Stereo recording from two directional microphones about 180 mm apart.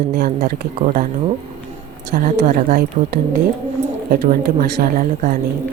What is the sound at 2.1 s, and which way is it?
Speech, 45° right (ahead or behind).